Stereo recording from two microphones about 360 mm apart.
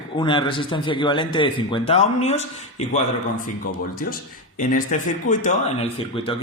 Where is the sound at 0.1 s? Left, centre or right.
Centre.